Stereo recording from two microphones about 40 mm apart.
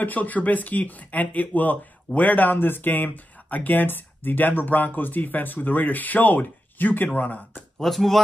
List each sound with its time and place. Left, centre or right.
0.0 s speech: left
7.8 s speech: centre